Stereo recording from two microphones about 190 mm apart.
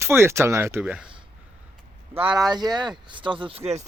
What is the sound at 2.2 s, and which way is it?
Speech, 25° right (ahead or behind).